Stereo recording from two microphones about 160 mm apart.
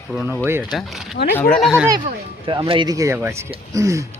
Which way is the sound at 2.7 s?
25° right (ahead or behind).